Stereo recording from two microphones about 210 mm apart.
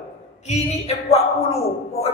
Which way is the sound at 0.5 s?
30° left (ahead or behind).